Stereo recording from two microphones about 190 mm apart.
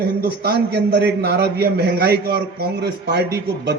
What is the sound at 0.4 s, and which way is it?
A man's voice, 60° right (ahead or behind).